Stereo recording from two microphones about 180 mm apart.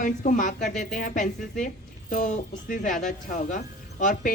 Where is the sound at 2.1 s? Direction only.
45° left (ahead or behind).